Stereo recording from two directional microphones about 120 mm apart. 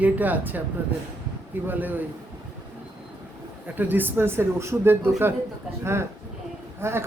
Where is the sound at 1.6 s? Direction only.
15° right (ahead or behind).